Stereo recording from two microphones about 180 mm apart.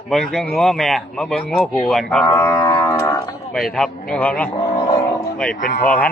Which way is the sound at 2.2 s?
15° left (ahead or behind).